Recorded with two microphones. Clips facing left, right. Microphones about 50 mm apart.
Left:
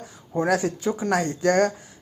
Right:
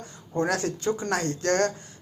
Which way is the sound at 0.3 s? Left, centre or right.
Centre.